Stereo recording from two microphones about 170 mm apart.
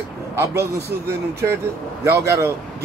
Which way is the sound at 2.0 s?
15° right (ahead or behind).